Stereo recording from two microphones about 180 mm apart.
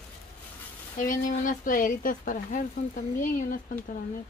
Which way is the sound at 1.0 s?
45° left (ahead or behind).